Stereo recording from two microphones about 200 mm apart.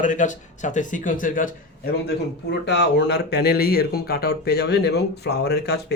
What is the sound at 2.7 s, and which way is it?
Speech, 60° left (ahead or behind).